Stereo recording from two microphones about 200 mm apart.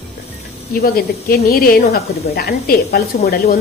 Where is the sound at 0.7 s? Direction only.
45° left (ahead or behind).